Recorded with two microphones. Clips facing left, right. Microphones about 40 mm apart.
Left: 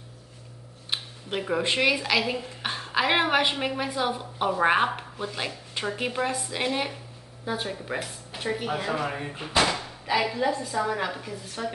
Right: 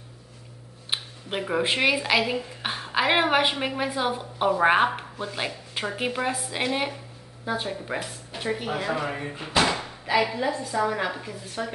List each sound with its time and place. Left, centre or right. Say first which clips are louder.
0.8 s speech: right 1 dB; centre